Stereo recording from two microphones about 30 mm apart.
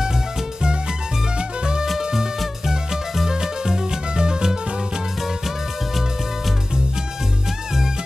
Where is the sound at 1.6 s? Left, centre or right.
Right.